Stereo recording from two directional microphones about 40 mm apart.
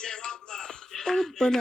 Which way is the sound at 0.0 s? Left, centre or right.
Centre.